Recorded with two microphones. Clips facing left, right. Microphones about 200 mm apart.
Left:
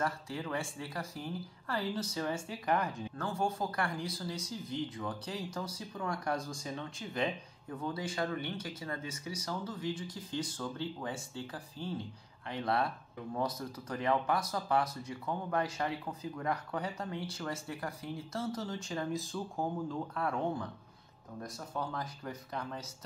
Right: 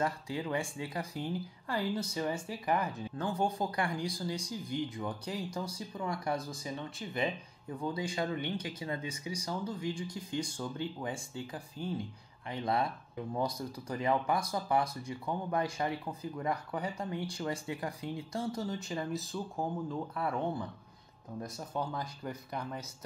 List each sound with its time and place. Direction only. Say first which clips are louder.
0.0 s speech: right 2 dB; 15° right (ahead or behind)
3.2 s speech: right 2 dB; 15° right (ahead or behind)